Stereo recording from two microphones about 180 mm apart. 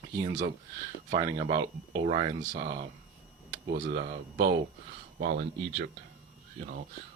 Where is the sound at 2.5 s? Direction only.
55° right (ahead or behind).